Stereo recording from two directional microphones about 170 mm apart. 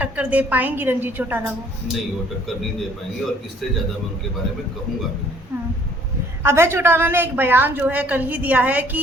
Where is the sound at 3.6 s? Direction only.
Centre (ahead or behind).